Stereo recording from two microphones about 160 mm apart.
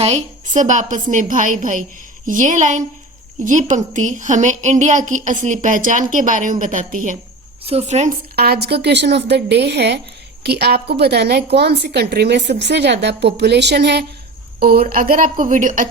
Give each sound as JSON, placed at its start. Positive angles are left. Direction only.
{"t": 0.0, "sound": "a woman's voice", "side_deg": -45}
{"t": 7.7, "sound": "a woman's voice", "side_deg": -40}
{"t": 8.4, "sound": "a woman's voice", "side_deg": -85}
{"t": 14.6, "sound": "a woman's voice", "side_deg": -70}